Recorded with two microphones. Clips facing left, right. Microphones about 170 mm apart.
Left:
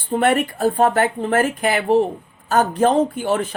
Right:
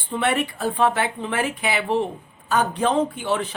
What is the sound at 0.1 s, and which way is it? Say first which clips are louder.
A woman's voice: left 5 dB; 50° left (ahead or behind).